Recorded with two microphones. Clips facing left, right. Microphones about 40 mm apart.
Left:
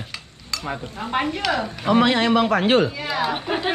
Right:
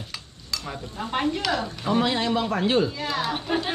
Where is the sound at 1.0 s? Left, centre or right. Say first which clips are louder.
Left 1 dB; centre.